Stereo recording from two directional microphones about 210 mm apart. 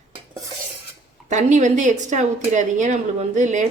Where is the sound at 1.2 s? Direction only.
35° right (ahead or behind).